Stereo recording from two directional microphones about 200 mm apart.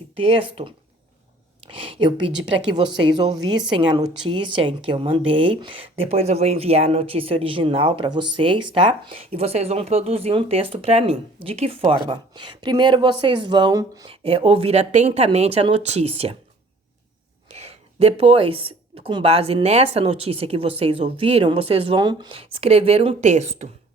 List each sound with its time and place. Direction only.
0.2 s speech: 25° right (ahead or behind)
17.5 s speech: 30° right (ahead or behind)